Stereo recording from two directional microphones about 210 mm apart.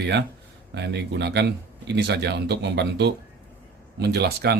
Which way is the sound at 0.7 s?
55° right (ahead or behind).